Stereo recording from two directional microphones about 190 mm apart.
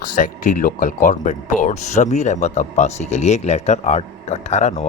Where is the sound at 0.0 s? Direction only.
45° left (ahead or behind).